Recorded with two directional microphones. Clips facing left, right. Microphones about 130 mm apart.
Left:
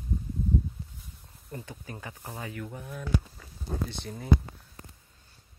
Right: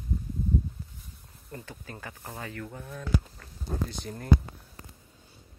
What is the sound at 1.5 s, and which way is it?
Speech, 15° left (ahead or behind).